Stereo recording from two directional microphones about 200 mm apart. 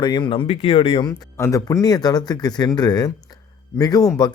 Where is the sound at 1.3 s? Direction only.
15° left (ahead or behind).